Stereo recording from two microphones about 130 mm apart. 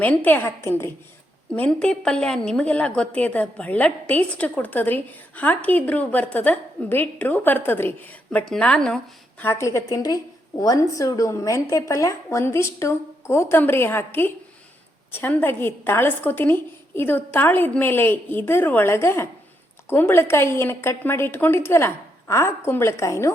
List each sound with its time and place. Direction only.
0.0 s a woman's voice: 10° left (ahead or behind)
1.5 s a woman's voice: 10° left (ahead or behind)
9.4 s a woman's voice: 20° left (ahead or behind)